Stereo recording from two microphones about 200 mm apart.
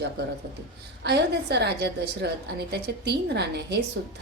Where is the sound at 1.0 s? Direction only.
55° right (ahead or behind).